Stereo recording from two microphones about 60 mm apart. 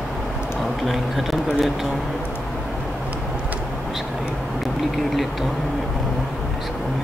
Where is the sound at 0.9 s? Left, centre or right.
Centre.